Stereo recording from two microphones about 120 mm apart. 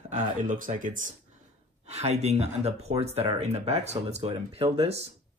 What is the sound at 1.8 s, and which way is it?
Speech, 65° right (ahead or behind).